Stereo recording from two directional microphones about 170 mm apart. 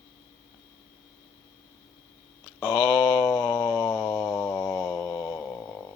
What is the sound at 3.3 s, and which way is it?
Mantra, 15° left (ahead or behind).